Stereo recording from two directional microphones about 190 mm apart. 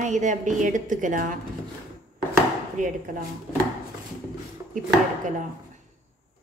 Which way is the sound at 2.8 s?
45° right (ahead or behind).